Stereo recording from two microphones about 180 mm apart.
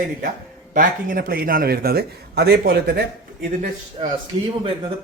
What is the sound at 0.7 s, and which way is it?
A man's voice, 50° right (ahead or behind).